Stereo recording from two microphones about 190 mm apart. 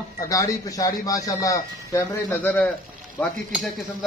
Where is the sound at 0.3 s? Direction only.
20° left (ahead or behind).